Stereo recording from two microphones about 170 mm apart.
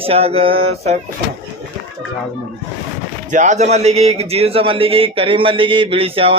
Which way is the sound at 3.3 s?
45° right (ahead or behind).